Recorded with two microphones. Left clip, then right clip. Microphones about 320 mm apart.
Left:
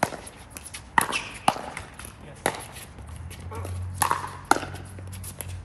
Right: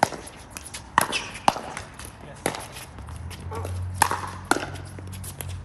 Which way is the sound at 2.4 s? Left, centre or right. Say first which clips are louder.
Left 1 dB; centre.